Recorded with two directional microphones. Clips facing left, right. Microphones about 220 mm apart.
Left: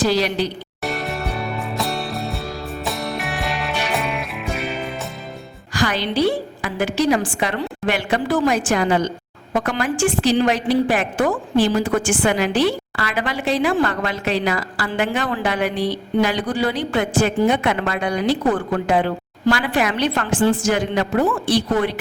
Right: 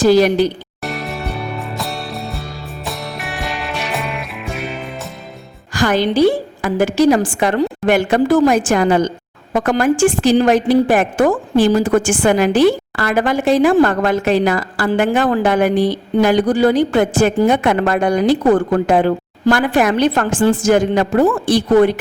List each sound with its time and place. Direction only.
0.0 s a woman's voice: 50° right (ahead or behind)
0.8 s music: centre (ahead or behind)
5.7 s a woman's voice: 50° right (ahead or behind)